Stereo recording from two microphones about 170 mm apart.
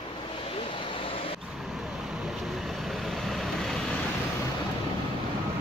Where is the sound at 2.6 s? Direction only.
Centre (ahead or behind).